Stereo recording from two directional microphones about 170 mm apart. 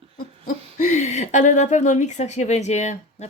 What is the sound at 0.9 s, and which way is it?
Speech, 45° left (ahead or behind).